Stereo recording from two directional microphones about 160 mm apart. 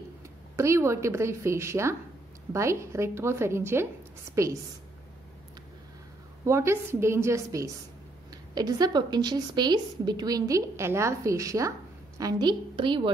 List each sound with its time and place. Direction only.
0.6 s a woman's voice: 15° right (ahead or behind)
6.4 s a woman's voice: 15° right (ahead or behind)